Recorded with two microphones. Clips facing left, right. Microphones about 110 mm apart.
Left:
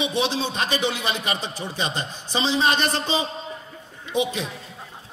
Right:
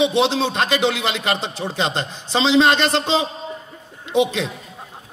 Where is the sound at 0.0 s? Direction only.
65° right (ahead or behind).